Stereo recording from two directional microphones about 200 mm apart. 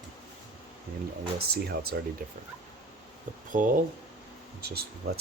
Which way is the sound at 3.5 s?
40° right (ahead or behind).